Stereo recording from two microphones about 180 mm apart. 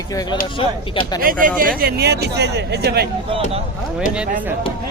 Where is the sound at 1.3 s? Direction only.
55° right (ahead or behind).